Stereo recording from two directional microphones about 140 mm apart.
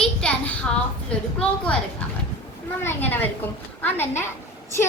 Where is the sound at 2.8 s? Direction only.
15° left (ahead or behind).